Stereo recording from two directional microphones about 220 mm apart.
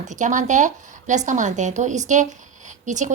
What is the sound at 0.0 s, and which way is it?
A woman's voice, 35° right (ahead or behind).